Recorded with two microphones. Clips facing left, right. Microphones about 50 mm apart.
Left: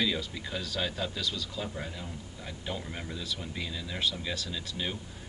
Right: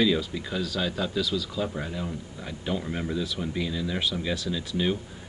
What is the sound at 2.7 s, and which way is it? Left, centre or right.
Speech, centre.